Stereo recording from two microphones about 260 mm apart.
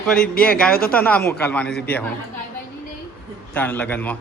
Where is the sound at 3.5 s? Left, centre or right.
Centre.